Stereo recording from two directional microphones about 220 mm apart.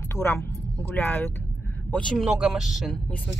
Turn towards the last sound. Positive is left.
turn(degrees=0)  # may be behind; listen again after turning